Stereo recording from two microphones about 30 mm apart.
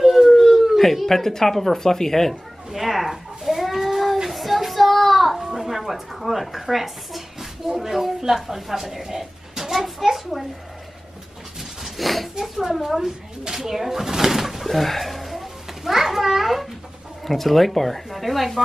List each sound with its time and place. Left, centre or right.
0.3 s howl: centre
0.7 s speech: centre
2.7 s a sound: centre
5.4 s speech: centre
7.6 s speech: centre
11.8 s a sound: centre
12.4 s speech: centre
13.5 s a sound: centre
17.3 s speech: centre